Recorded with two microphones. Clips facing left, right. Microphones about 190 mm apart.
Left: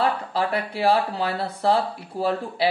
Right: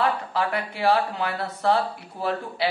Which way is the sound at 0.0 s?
35° left (ahead or behind).